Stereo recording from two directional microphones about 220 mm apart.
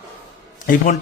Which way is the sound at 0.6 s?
35° left (ahead or behind).